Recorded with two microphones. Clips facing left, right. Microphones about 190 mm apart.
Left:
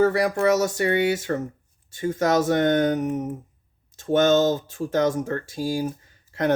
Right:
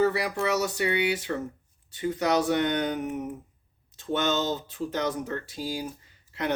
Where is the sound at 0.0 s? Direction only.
45° left (ahead or behind).